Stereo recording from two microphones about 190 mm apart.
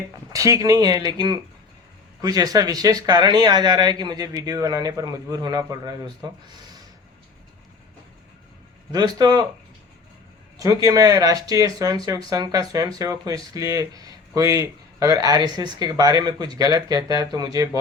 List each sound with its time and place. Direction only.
0.3 s speech: 15° right (ahead or behind)
8.9 s speech: 20° right (ahead or behind)
10.6 s speech: 20° right (ahead or behind)